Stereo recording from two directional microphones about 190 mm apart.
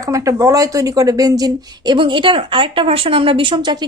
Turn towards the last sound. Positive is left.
turn(degrees=-25)  # may be behind; listen again after turning